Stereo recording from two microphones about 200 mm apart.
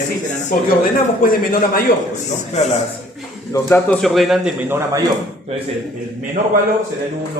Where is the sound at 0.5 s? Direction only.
45° left (ahead or behind).